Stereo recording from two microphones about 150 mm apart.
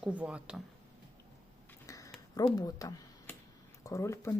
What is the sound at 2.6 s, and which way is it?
A woman's voice, 25° left (ahead or behind).